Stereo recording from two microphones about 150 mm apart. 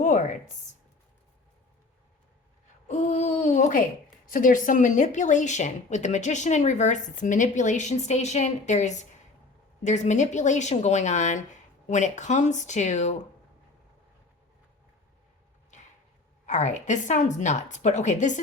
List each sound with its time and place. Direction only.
0.0 s speech: 55° left (ahead or behind)
2.8 s speech: 50° left (ahead or behind)
16.5 s speech: 55° left (ahead or behind)